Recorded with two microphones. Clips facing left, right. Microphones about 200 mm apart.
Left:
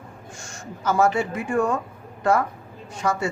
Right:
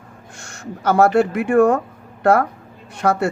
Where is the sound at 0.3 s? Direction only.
65° right (ahead or behind).